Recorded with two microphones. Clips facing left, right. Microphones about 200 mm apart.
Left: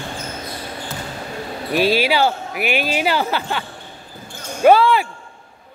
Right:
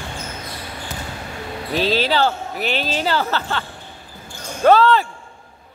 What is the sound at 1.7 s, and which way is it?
Speech, 10° left (ahead or behind).